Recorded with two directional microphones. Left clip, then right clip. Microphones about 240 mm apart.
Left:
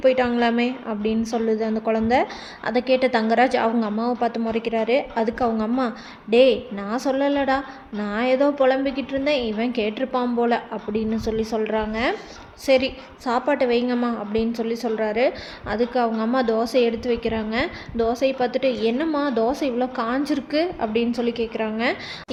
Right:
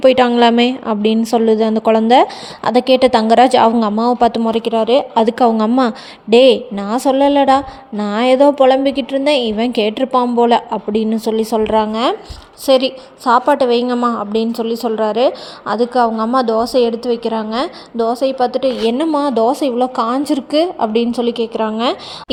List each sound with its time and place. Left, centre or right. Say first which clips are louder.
0.0 s a woman's voice: right 9 dB; right